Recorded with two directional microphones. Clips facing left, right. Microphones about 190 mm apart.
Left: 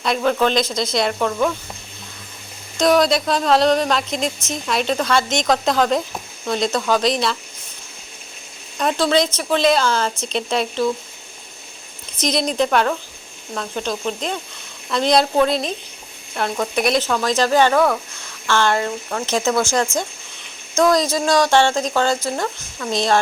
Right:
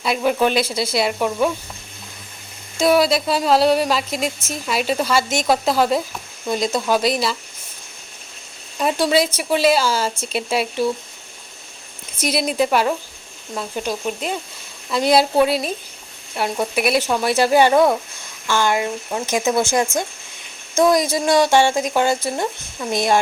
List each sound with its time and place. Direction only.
0.0 s speech: 10° right (ahead or behind)
2.7 s speech: 5° right (ahead or behind)
8.8 s speech: 10° right (ahead or behind)
12.2 s speech: 5° right (ahead or behind)
19.9 s speech: 50° right (ahead or behind)
20.7 s speech: 20° right (ahead or behind)